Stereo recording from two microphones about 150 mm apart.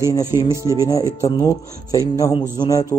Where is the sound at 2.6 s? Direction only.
25° left (ahead or behind).